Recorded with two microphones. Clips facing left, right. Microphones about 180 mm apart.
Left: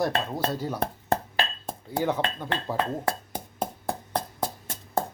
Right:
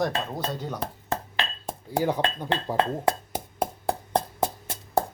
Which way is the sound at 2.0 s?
15° right (ahead or behind).